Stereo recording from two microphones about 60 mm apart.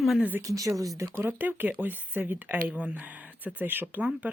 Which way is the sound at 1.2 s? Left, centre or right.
Right.